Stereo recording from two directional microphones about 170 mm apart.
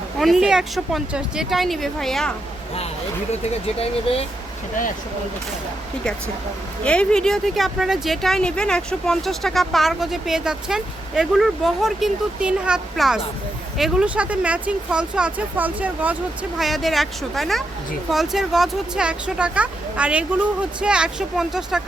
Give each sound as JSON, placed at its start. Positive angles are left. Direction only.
{"t": 0.2, "sound": "speech", "side_deg": 0}
{"t": 3.8, "sound": "speech", "side_deg": 35}
{"t": 6.8, "sound": "speech", "side_deg": 5}